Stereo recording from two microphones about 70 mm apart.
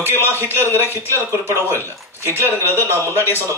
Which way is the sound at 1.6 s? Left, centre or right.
Left.